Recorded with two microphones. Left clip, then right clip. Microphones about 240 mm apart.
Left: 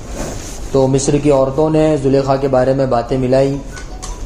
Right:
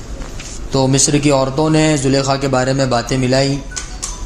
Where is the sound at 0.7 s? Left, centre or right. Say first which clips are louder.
Left 1 dB; right.